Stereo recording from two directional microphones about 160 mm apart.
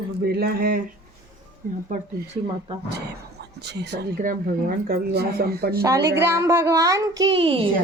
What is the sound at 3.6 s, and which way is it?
Speech, 90° right.